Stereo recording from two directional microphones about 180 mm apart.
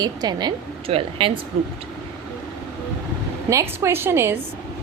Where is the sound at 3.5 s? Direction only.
15° right (ahead or behind).